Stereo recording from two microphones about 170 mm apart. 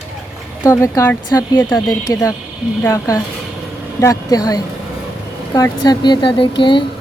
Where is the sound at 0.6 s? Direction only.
15° left (ahead or behind).